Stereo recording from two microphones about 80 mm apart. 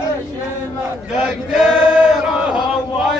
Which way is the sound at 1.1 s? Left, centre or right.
Centre.